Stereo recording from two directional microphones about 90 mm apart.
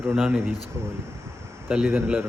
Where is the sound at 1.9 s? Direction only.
15° right (ahead or behind).